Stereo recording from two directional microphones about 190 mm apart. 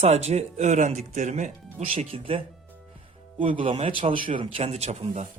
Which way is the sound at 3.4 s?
30° right (ahead or behind).